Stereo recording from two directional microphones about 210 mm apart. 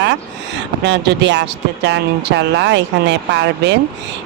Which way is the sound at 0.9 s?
55° right (ahead or behind).